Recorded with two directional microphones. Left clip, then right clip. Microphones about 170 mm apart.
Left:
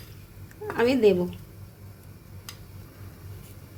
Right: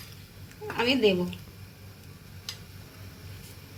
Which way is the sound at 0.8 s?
60° left (ahead or behind).